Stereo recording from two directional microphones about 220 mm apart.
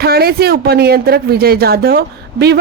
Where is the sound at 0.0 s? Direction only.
45° right (ahead or behind).